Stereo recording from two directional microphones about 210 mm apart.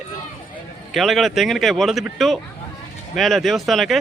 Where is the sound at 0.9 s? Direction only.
Centre (ahead or behind).